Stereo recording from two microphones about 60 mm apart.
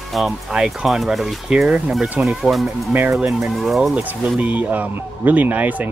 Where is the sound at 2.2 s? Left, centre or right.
Centre.